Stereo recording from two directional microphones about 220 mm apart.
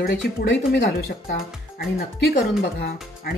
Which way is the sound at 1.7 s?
45° left (ahead or behind).